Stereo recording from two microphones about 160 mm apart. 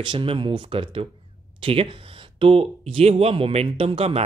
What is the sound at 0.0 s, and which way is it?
A woman's voice, 30° right (ahead or behind).